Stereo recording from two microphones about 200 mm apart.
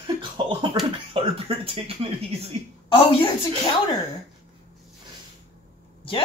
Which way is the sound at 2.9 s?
30° left (ahead or behind).